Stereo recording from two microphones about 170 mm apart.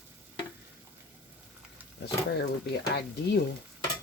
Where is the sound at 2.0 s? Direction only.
75° left (ahead or behind).